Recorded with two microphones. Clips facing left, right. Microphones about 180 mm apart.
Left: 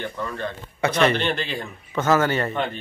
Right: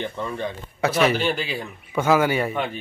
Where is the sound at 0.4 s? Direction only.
15° right (ahead or behind).